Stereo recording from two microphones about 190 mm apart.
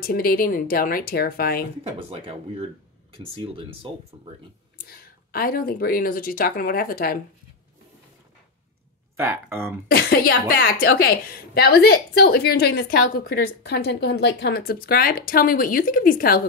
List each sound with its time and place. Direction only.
0.0 s a woman's voice: 50° left (ahead or behind)
1.9 s speech: 30° right (ahead or behind)
4.7 s a woman's voice: 50° left (ahead or behind)
9.1 s speech: 15° right (ahead or behind)
9.8 s a woman's voice: 50° left (ahead or behind)